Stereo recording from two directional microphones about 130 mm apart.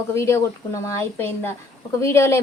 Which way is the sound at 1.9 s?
20° left (ahead or behind).